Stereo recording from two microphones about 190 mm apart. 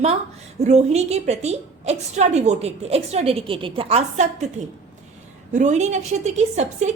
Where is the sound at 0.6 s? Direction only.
35° right (ahead or behind).